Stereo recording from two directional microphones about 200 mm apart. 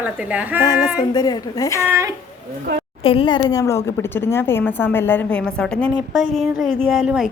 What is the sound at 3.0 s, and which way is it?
A woman's voice, 25° left (ahead or behind).